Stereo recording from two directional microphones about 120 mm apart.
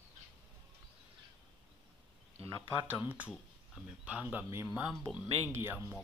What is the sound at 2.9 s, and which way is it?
Speech, 15° right (ahead or behind).